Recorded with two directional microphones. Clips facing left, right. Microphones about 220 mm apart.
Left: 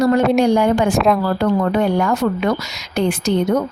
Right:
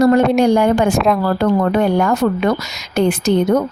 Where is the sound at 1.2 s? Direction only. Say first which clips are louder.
Right 2 dB; 50° right (ahead or behind).